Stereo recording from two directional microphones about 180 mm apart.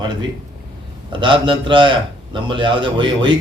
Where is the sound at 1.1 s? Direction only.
25° right (ahead or behind).